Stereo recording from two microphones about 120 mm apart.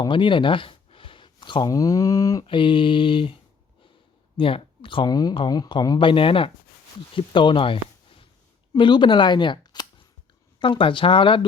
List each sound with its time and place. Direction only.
0.0 s a sound: 45° left (ahead or behind)
1.7 s speech: 30° left (ahead or behind)
2.4 s speech: 45° left (ahead or behind)
4.4 s speech: 45° left (ahead or behind)